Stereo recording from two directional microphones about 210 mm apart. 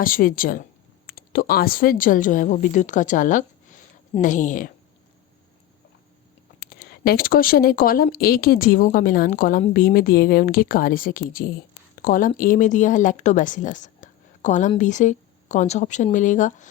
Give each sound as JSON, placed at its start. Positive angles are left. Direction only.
{"t": 0.0, "sound": "a woman's voice", "side_deg": 40}
{"t": 6.6, "sound": "a woman's voice", "side_deg": 50}